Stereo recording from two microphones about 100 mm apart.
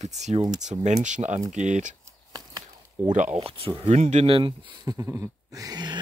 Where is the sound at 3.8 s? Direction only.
80° right; by 4.7 s 60° right (ahead or behind).